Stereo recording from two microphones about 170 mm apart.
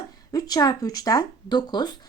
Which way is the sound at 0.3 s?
20° left (ahead or behind).